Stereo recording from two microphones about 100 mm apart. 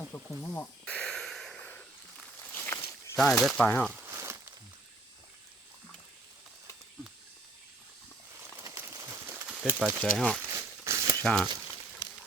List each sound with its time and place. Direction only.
0.1 s speech: 25° left (ahead or behind)
0.9 s a sound: 10° left (ahead or behind)
1.6 s snake: 20° left (ahead or behind)
3.2 s speech: centre (ahead or behind)
3.6 s speech: 15° left (ahead or behind)
3.9 s a sound: 25° right (ahead or behind)
8.6 s a sound: 30° right (ahead or behind)
9.5 s speech: 10° right (ahead or behind)
10.0 s speech: 5° left (ahead or behind)
10.5 s crumpling: 30° right (ahead or behind)
11.2 s speech: 5° left (ahead or behind)